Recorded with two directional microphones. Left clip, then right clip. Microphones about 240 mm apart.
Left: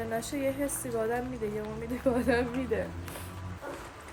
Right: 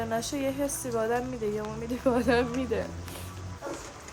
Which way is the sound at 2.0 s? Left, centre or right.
Centre.